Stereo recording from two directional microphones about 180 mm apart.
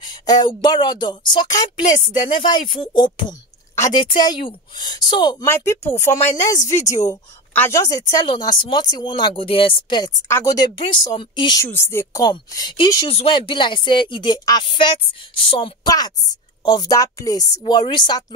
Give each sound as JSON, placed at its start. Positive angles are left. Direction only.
{"t": 0.0, "sound": "speech", "side_deg": 25}
{"t": 5.5, "sound": "speech", "side_deg": 15}
{"t": 6.6, "sound": "speech", "side_deg": 40}
{"t": 7.1, "sound": "speech", "side_deg": 15}
{"t": 11.6, "sound": "speech", "side_deg": 15}